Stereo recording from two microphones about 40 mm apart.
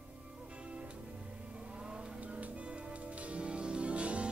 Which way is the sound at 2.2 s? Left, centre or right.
Right.